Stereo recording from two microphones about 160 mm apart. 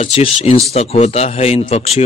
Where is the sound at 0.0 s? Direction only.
40° left (ahead or behind).